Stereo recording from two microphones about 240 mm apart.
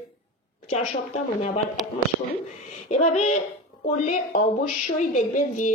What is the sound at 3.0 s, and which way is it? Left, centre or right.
A woman's voice, left.